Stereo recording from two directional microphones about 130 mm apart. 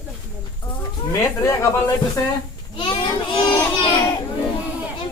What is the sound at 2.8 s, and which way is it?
A child's voice, 45° left (ahead or behind).